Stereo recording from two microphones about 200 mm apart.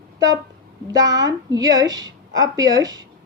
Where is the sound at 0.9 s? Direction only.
20° right (ahead or behind).